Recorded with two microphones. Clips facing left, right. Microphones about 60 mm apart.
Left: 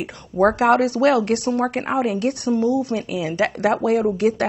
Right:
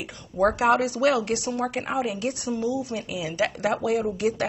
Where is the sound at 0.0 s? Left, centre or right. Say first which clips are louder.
Left 5 dB; left.